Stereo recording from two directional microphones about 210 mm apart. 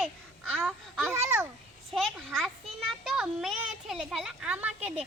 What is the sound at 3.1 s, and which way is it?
Child singing, centre (ahead or behind).